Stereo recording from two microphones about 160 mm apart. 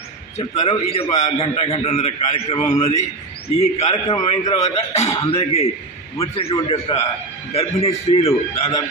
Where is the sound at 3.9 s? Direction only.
25° left (ahead or behind).